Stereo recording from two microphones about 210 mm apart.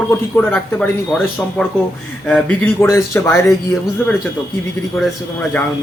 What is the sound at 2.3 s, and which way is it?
Speech, 10° left (ahead or behind).